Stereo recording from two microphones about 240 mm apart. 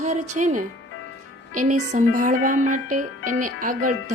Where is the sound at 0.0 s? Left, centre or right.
Right.